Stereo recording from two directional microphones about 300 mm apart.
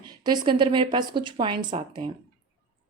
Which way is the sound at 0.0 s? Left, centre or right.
Centre.